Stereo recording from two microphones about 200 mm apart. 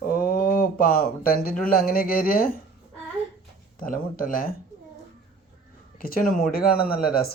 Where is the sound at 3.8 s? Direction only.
45° left (ahead or behind).